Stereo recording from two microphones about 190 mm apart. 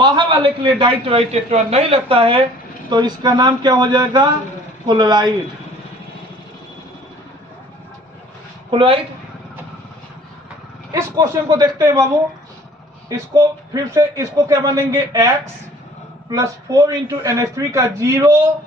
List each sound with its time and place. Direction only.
0.0 s a man's voice: 25° right (ahead or behind)
8.7 s a man's voice: 25° right (ahead or behind)
10.9 s a man's voice: 20° right (ahead or behind)
13.1 s speech: 15° right (ahead or behind)